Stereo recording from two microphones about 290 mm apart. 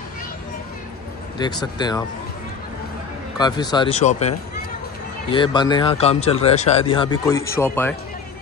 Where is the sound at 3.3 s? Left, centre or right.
Centre.